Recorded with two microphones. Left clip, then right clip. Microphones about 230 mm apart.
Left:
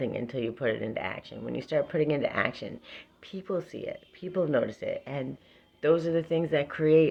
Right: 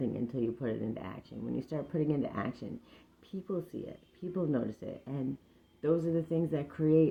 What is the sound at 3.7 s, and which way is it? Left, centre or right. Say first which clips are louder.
Speech: left 7 dB; left.